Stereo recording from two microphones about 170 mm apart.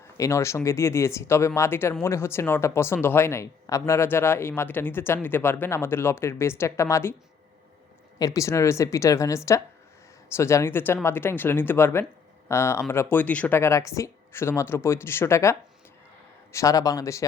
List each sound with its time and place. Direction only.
0.2 s speech: 15° left (ahead or behind)
8.2 s speech: 20° left (ahead or behind)